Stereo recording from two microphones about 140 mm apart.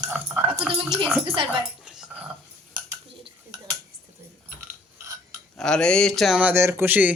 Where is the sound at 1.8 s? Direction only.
5° right (ahead or behind).